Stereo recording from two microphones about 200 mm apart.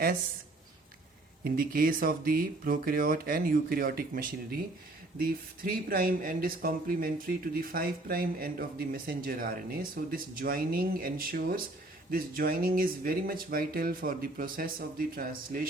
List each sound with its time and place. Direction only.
1.5 s speech: 45° right (ahead or behind)